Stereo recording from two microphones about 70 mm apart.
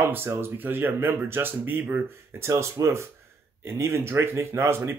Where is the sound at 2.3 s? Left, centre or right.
Right.